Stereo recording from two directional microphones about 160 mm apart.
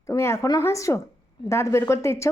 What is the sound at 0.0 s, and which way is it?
Speech, 20° left (ahead or behind).